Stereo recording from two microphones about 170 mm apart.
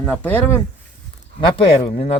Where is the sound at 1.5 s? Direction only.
40° left (ahead or behind).